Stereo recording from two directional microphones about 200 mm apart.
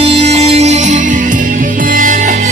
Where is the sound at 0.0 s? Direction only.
30° right (ahead or behind).